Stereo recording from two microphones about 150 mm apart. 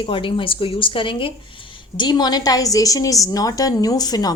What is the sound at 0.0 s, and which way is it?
Speech, 35° left (ahead or behind).